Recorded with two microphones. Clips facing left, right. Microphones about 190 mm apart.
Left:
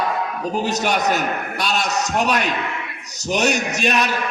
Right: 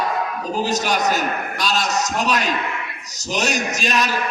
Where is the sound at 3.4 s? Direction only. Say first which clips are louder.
Left 2 dB; 60° left (ahead or behind).